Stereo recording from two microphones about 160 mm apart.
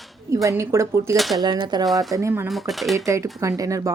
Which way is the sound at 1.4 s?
25° right (ahead or behind).